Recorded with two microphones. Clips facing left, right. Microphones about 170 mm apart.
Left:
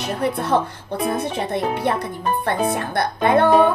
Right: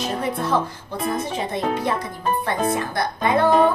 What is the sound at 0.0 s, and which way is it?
A child's voice, 65° left (ahead or behind).